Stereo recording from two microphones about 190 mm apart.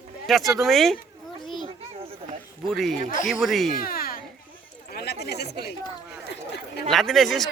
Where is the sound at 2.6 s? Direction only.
Centre (ahead or behind).